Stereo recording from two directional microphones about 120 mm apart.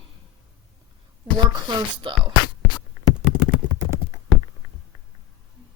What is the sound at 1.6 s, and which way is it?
Speech, 40° right (ahead or behind).